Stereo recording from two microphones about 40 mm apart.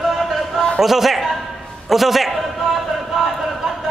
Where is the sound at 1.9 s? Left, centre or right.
Centre.